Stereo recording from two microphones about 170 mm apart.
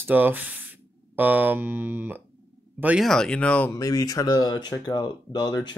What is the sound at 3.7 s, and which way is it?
Speech, 20° left (ahead or behind).